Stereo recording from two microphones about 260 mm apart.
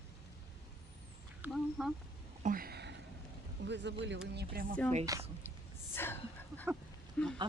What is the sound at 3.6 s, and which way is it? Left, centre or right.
Speech, right.